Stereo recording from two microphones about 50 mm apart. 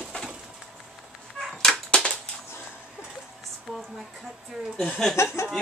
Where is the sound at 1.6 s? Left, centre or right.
Centre.